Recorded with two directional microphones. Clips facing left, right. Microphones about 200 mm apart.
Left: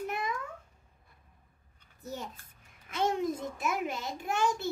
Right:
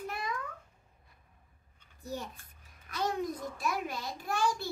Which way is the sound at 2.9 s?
25° left (ahead or behind).